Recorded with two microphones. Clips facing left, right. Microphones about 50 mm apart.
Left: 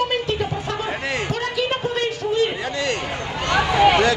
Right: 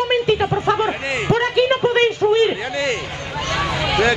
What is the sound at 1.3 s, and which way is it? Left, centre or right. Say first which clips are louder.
A man's voice: right 11 dB; right.